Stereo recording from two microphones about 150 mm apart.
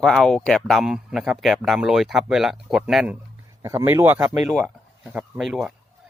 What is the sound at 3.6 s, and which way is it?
A man's voice, 15° right (ahead or behind).